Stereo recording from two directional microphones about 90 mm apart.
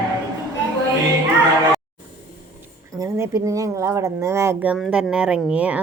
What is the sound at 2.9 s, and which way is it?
Speech, 35° right (ahead or behind).